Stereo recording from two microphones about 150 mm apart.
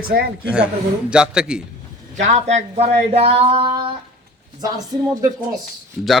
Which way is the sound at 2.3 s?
50° right (ahead or behind).